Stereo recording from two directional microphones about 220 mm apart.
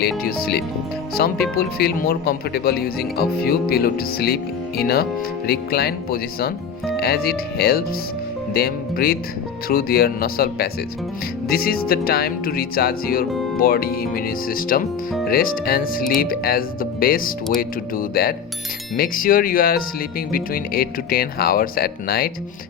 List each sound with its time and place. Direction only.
0.2 s speech: 45° left (ahead or behind)